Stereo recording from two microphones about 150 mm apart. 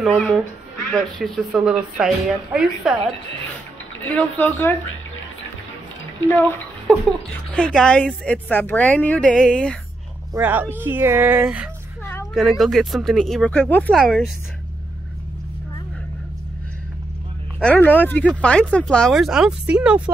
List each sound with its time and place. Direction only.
0.0 s speech: centre (ahead or behind)
4.1 s speech: 10° left (ahead or behind)
6.9 s speech: 5° left (ahead or behind)
10.3 s speech: 10° right (ahead or behind)
12.0 s a sound: 20° left (ahead or behind)
12.4 s speech: centre (ahead or behind)
13.9 s speech: centre (ahead or behind)
17.6 s speech: 10° left (ahead or behind); by 20.0 s 10° right (ahead or behind)